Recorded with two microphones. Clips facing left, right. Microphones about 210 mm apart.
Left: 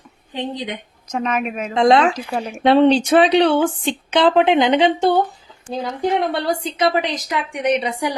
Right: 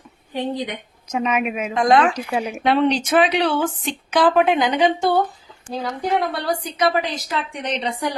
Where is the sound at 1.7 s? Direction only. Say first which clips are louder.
Left 3 dB; 25° left (ahead or behind).